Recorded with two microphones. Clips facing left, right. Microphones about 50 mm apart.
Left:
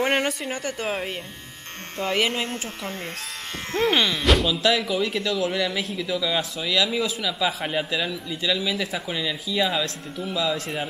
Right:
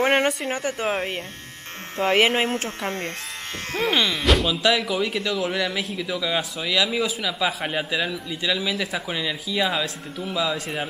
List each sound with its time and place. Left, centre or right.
0.0 s speech: centre
2.0 s speech: centre
2.8 s speech: right
3.7 s speech: centre